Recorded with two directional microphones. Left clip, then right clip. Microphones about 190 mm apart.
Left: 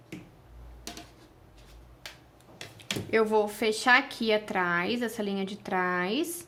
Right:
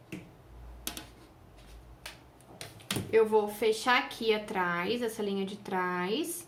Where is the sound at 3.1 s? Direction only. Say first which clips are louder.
Even; 45° left (ahead or behind).